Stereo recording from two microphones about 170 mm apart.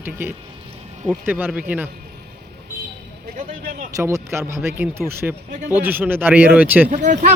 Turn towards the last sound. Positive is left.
turn(degrees=-45)  # may be behind; listen again after turning